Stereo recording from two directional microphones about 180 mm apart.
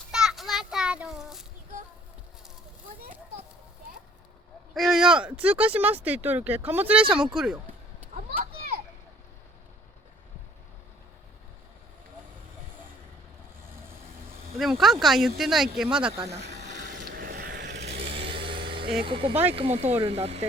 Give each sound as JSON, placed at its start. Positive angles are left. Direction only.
{"t": 0.1, "sound": "children playing", "side_deg": -5}
{"t": 4.7, "sound": "speech", "side_deg": 0}
{"t": 8.1, "sound": "children playing", "side_deg": -50}
{"t": 14.6, "sound": "speech", "side_deg": 0}
{"t": 16.1, "sound": "speech", "side_deg": -15}
{"t": 16.4, "sound": "a sound", "side_deg": -70}
{"t": 17.0, "sound": "vehicle", "side_deg": -55}
{"t": 18.2, "sound": "vehicle", "side_deg": -30}
{"t": 19.0, "sound": "speech", "side_deg": -30}